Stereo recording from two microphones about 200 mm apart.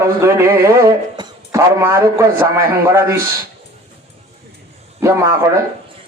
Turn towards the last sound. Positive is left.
turn(degrees=-15)  # may be behind; listen again after turning